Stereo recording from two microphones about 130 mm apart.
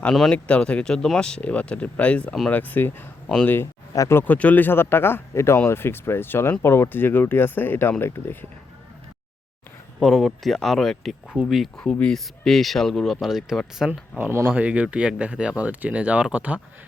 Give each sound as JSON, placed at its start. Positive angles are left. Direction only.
{"t": 0.0, "sound": "speech", "side_deg": 5}
{"t": 3.5, "sound": "speech", "side_deg": 20}
{"t": 4.2, "sound": "speech", "side_deg": 10}
{"t": 10.0, "sound": "speech", "side_deg": 0}
{"t": 14.2, "sound": "speech", "side_deg": -15}